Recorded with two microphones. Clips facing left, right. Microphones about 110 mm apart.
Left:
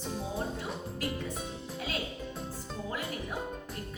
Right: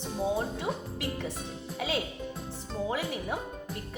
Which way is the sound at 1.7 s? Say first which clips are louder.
Right 6 dB; 90° right.